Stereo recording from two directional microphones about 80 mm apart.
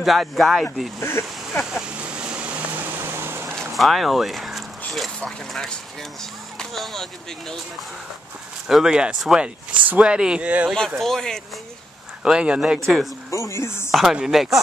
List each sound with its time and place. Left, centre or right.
0.0 s speech: centre
1.0 s speech: left
1.7 s vehicle: centre; by 3.5 s right
3.5 s a sound: centre
6.6 s speech: centre
8.6 s speech: centre
9.7 s speech: centre
11.0 s speech: centre
12.3 s speech: centre
13.3 s a sound: left
14.1 s speech: centre